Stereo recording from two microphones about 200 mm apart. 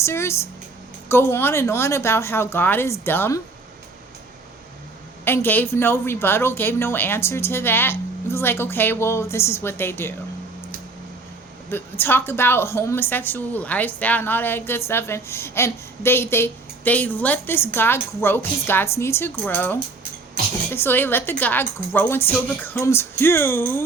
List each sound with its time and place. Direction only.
0.0 s a woman's voice: 15° left (ahead or behind)
5.2 s a woman's voice: 10° left (ahead or behind)
11.7 s a woman's voice: 10° left (ahead or behind)